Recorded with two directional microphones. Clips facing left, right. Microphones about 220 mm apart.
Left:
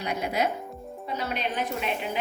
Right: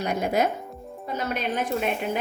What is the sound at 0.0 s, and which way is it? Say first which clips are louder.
A woman's voice: right 4 dB; 45° right (ahead or behind).